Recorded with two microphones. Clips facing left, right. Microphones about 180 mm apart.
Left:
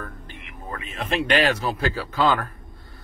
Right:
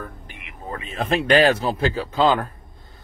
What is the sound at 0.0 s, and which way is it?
Speech, 15° right (ahead or behind).